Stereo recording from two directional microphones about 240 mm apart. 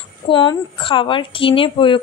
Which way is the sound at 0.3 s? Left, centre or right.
Centre.